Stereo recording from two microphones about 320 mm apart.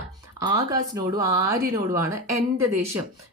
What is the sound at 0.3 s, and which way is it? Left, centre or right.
Speech, centre.